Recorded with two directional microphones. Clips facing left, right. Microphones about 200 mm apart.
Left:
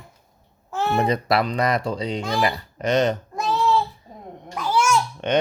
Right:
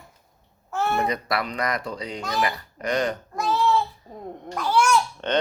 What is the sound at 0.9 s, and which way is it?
Speech, 30° left (ahead or behind).